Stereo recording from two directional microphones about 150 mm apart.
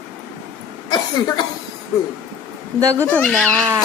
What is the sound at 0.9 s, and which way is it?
Speech, 25° left (ahead or behind).